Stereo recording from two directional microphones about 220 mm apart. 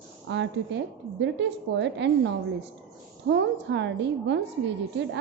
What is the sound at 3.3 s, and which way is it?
A woman's voice, 55° right (ahead or behind).